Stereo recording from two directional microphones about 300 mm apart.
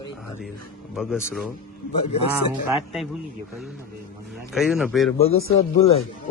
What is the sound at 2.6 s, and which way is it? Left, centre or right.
Speech, centre.